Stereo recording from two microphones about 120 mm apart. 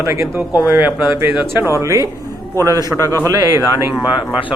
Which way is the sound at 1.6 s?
25° right (ahead or behind).